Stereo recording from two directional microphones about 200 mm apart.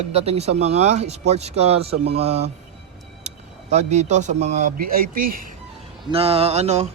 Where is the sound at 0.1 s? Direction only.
30° right (ahead or behind).